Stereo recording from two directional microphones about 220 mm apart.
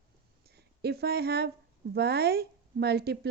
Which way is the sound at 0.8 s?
45° right (ahead or behind).